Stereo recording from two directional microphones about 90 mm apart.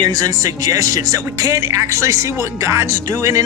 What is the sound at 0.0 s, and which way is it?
Speech, 45° right (ahead or behind).